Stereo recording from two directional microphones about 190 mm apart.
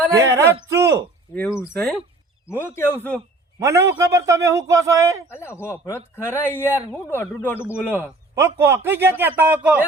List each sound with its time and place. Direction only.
0.1 s a sound: 15° right (ahead or behind)
0.7 s a man's voice: 15° right (ahead or behind)
1.6 s speech: 5° left (ahead or behind)
3.6 s a man's voice: 15° right (ahead or behind)
5.3 s speech: 10° left (ahead or behind)
8.0 s a man's voice: 15° right (ahead or behind)